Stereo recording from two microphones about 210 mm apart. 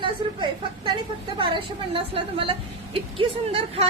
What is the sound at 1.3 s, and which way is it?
A woman's voice, 25° right (ahead or behind).